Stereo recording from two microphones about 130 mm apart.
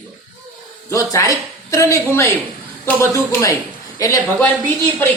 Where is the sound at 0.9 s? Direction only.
25° left (ahead or behind).